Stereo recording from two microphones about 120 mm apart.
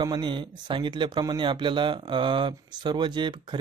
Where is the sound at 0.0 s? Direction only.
40° right (ahead or behind).